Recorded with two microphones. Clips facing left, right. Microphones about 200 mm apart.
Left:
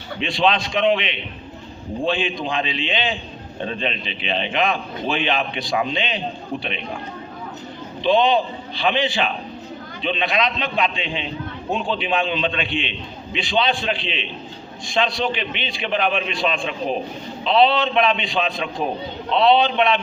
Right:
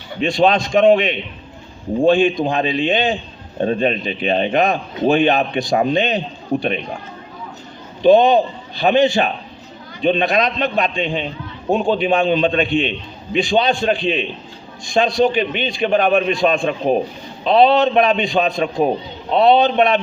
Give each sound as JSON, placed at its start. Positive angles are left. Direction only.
{"t": 0.2, "sound": "a man's voice", "side_deg": -45}
{"t": 8.0, "sound": "a man's voice", "side_deg": -45}